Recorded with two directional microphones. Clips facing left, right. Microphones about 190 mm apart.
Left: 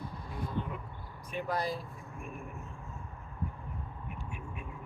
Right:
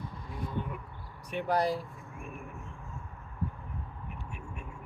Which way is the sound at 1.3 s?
75° right (ahead or behind).